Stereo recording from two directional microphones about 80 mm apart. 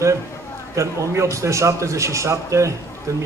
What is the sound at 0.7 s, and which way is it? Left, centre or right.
A man's voice, right.